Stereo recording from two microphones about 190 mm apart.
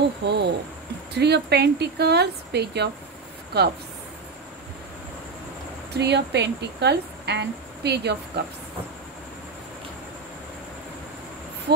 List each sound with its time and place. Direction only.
0.2 s speech: 65° right (ahead or behind)
5.9 s speech: 65° right (ahead or behind)